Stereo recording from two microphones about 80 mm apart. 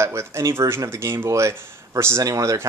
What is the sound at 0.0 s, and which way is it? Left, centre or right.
Speech, right.